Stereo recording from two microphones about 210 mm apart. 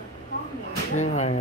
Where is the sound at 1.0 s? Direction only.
35° left (ahead or behind).